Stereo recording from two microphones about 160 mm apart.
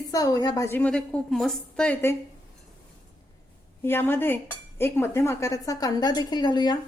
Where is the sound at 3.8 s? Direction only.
15° left (ahead or behind).